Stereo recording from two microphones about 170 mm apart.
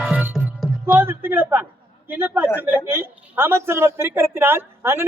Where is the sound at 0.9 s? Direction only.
15° right (ahead or behind).